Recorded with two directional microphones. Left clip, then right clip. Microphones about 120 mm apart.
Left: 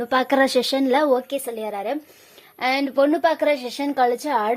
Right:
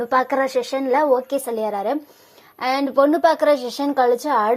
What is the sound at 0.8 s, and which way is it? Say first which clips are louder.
Speech: right 3 dB; 90° left.